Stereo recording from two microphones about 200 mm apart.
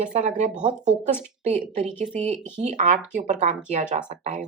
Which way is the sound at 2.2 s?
35° right (ahead or behind).